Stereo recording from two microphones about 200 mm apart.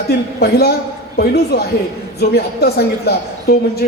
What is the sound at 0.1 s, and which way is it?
A man's voice, 50° left (ahead or behind).